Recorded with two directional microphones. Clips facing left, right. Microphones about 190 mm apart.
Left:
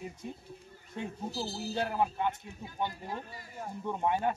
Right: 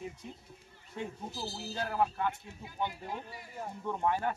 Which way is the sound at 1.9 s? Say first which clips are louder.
Right 3 dB; 20° left (ahead or behind).